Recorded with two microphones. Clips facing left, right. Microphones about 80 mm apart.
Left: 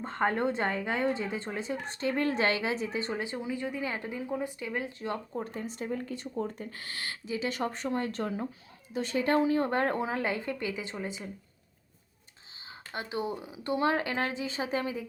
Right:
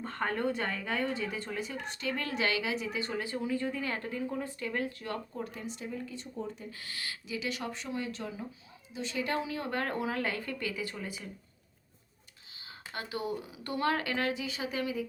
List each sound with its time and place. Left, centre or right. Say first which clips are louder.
0.0 s speech: left 4 dB; left
12.6 s speech: left 2 dB; left